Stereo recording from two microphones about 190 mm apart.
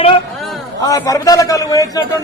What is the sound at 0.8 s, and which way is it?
A man's voice, 20° left (ahead or behind).